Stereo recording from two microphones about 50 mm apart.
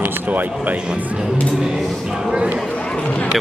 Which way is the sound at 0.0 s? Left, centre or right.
Right.